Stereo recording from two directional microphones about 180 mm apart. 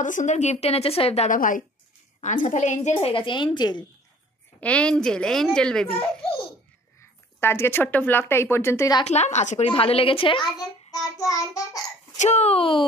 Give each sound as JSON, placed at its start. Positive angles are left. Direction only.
{"t": 0.0, "sound": "a woman's voice", "side_deg": 45}
{"t": 2.9, "sound": "a woman's voice", "side_deg": 30}
{"t": 4.6, "sound": "a woman's voice", "side_deg": 5}
{"t": 7.0, "sound": "speech", "side_deg": 15}
{"t": 9.0, "sound": "a woman's voice", "side_deg": 40}
{"t": 12.2, "sound": "a woman's voice", "side_deg": 40}